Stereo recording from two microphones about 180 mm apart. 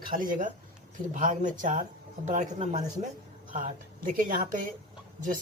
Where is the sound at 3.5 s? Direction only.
45° right (ahead or behind).